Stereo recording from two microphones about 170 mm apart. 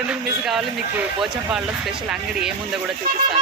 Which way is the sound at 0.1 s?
Centre (ahead or behind).